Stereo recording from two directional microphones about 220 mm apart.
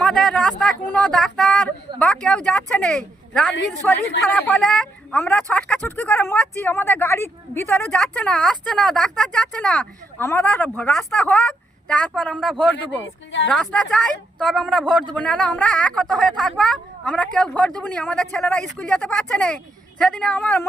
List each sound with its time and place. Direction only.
0.0 s a sound: centre (ahead or behind)
0.9 s a woman's voice: 5° left (ahead or behind)
12.7 s speech: 55° left (ahead or behind)
13.5 s a woman's voice: centre (ahead or behind)